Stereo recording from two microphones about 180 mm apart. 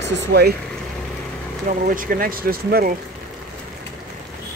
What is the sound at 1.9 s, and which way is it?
Speech, 50° right (ahead or behind).